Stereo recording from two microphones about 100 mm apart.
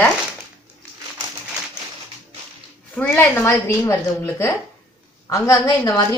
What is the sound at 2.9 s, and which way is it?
A woman's voice, 20° left (ahead or behind).